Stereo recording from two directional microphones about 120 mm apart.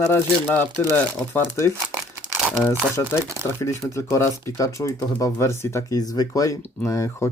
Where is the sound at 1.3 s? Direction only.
20° left (ahead or behind).